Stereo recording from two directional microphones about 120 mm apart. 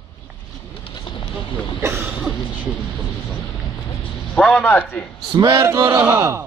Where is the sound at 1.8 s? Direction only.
20° right (ahead or behind).